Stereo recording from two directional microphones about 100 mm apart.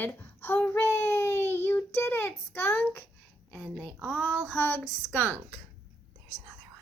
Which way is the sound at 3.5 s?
10° left (ahead or behind).